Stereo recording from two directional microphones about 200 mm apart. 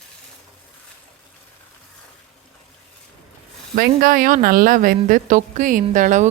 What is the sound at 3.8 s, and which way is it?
A woman's voice, 45° right (ahead or behind).